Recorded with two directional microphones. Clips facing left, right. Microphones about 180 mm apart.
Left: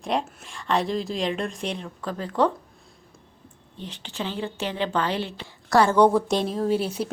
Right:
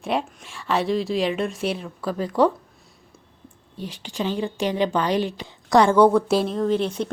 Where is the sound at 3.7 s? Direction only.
10° right (ahead or behind).